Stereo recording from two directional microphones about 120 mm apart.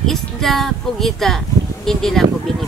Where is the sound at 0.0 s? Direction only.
Centre (ahead or behind).